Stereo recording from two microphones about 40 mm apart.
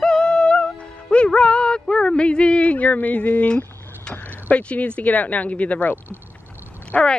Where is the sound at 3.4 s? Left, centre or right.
Left.